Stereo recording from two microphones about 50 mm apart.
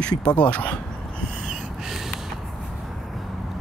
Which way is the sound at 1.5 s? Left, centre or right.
Centre.